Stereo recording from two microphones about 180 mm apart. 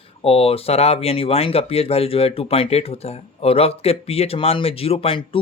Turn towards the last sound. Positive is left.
turn(degrees=30)  # may be behind; listen again after turning